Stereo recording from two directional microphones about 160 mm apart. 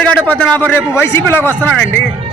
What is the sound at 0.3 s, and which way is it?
A man's voice, 10° left (ahead or behind).